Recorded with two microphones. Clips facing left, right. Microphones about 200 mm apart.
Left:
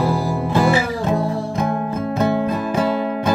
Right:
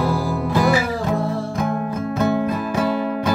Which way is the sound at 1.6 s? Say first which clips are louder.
Left 2 dB; 30° left (ahead or behind).